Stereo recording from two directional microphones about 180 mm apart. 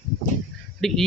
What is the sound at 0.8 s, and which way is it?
Speech, centre (ahead or behind).